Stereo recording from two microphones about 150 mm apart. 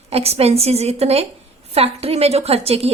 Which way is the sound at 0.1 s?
40° right (ahead or behind).